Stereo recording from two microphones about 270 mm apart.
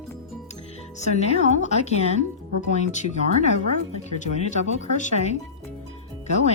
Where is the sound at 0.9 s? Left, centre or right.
Left.